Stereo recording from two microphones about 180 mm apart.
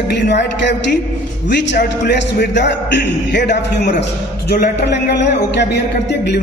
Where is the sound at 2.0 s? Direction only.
75° left (ahead or behind).